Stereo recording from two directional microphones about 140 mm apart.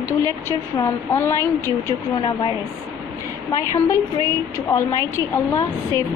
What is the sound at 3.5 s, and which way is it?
A woman's voice, 25° left (ahead or behind).